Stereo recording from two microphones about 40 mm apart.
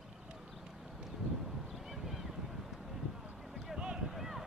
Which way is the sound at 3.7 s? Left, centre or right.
Right.